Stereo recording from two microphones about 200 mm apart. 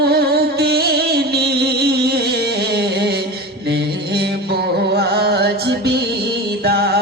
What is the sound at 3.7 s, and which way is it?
Mantra, 55° right (ahead or behind).